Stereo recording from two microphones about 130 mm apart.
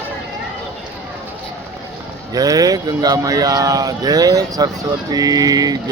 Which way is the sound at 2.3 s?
30° right (ahead or behind).